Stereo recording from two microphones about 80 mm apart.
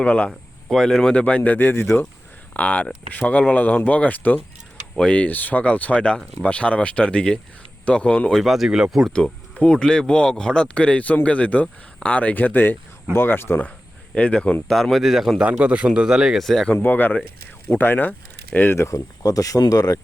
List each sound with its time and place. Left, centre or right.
0.0 s speech: centre
8.3 s speech: centre
9.1 s speech: centre; by 13.7 s left
14.2 s speech: centre
15.4 s speech: centre
16.6 s speech: left
18.8 s speech: left